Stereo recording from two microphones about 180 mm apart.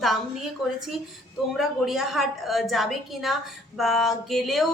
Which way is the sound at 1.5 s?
Centre (ahead or behind).